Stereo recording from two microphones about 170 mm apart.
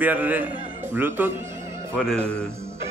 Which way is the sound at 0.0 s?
10° right (ahead or behind).